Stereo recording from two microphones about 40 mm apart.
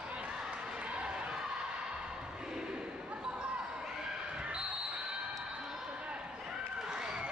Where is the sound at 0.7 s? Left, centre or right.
Right.